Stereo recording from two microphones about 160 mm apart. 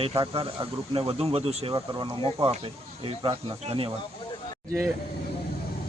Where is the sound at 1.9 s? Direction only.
25° right (ahead or behind).